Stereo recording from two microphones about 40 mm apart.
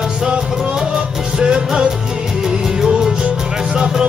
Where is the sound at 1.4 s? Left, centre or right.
Right.